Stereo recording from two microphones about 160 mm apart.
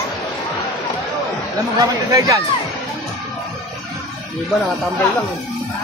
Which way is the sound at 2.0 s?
20° right (ahead or behind).